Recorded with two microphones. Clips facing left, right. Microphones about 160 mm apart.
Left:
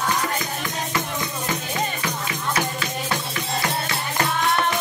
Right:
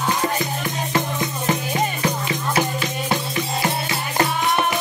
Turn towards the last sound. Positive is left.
turn(degrees=-25)  # may be behind; listen again after turning